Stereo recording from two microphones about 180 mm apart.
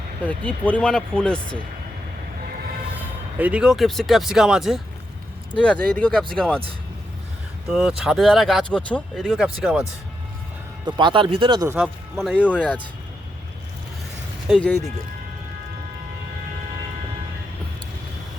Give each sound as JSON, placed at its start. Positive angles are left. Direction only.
{"t": 0.3, "sound": "speech", "side_deg": 10}
{"t": 2.9, "sound": "speech", "side_deg": -10}
{"t": 7.7, "sound": "speech", "side_deg": -5}
{"t": 10.8, "sound": "speech", "side_deg": -25}
{"t": 11.7, "sound": "speech", "side_deg": 0}
{"t": 14.4, "sound": "speech", "side_deg": 5}